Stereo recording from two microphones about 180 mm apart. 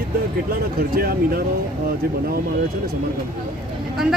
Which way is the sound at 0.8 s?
55° right (ahead or behind).